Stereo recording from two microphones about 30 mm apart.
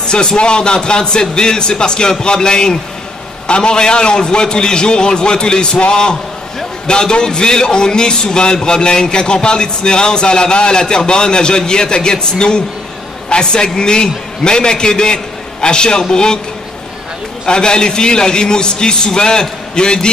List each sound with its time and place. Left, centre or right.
0.4 s speech: left
17.5 s speech: left